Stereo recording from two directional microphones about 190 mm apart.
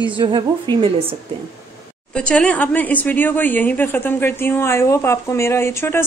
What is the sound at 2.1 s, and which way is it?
Speech, 5° left (ahead or behind).